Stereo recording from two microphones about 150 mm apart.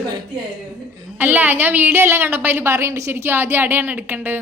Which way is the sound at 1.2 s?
10° right (ahead or behind).